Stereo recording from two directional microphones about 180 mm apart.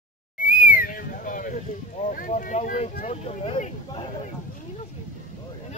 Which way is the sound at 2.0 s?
45° left (ahead or behind).